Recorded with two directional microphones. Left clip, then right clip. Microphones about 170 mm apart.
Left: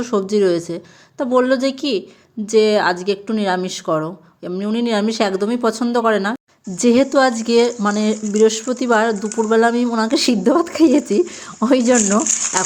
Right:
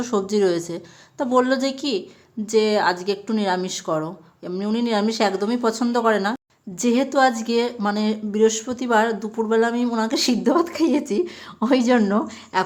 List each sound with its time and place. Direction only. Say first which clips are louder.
0.0 s a woman's voice: left 4 dB; 15° left (ahead or behind)
6.7 s a woman's voice: left 5 dB; 30° left (ahead or behind)